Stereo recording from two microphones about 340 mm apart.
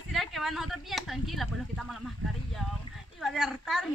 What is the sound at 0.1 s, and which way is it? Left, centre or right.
Speech, centre.